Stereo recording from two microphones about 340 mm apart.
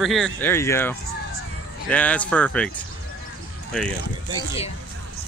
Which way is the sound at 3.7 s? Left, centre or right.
Centre.